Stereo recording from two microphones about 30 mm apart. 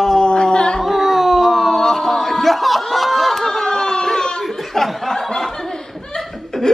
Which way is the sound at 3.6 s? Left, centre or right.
Centre.